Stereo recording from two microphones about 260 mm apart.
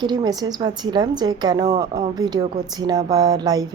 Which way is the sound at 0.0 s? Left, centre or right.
Centre.